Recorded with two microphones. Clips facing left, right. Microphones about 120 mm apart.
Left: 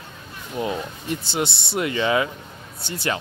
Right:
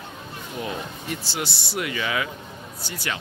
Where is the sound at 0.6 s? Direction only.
25° left (ahead or behind).